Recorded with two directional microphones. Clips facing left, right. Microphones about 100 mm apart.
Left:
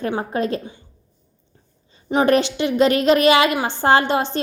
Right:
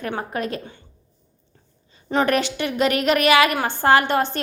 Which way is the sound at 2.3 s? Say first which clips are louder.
Left 4 dB; 25° left (ahead or behind).